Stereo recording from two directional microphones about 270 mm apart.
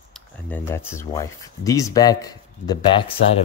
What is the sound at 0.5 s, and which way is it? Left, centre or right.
Speech, centre.